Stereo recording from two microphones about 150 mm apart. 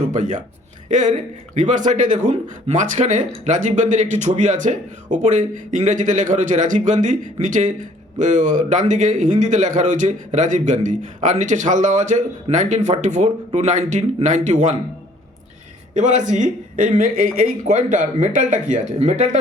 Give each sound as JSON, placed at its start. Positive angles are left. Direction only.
{"t": 0.0, "sound": "speech", "side_deg": -55}
{"t": 16.0, "sound": "speech", "side_deg": -55}